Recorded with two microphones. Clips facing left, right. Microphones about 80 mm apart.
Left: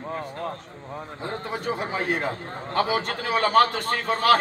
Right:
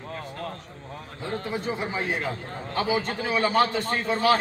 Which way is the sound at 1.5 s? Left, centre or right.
Left.